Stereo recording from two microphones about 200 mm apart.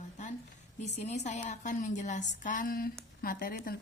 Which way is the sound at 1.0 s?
35° left (ahead or behind).